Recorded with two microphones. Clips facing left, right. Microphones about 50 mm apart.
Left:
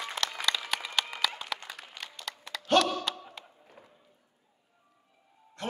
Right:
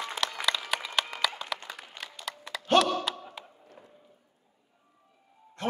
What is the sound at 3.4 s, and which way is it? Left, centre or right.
Arrow, centre.